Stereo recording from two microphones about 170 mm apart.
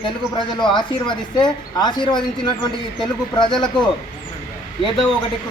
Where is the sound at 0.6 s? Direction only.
25° left (ahead or behind).